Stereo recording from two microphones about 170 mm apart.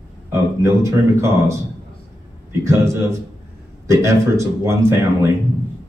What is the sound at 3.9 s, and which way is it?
Speech, 15° right (ahead or behind).